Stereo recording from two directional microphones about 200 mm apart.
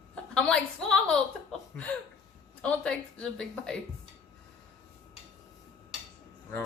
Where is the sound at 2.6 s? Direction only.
5° left (ahead or behind).